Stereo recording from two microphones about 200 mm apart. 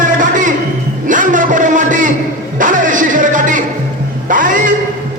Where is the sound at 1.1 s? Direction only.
40° right (ahead or behind).